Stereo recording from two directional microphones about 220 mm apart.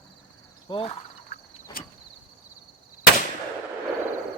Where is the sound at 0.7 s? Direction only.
25° left (ahead or behind).